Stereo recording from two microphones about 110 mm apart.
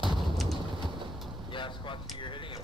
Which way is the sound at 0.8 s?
45° right (ahead or behind).